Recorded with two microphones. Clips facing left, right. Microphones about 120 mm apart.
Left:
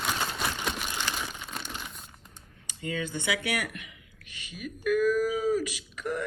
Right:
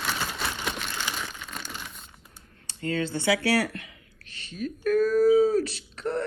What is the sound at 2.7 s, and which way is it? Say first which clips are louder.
Speech: right 5 dB; 15° left (ahead or behind).